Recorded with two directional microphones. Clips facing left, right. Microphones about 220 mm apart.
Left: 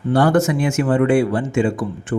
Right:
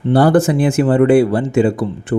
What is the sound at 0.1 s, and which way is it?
Speech, 35° right (ahead or behind).